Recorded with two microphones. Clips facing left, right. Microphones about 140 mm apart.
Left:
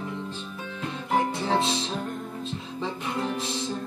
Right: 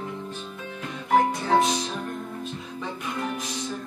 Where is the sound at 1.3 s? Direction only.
30° left (ahead or behind).